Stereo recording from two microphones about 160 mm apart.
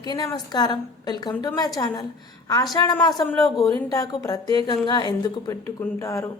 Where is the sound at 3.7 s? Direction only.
20° left (ahead or behind).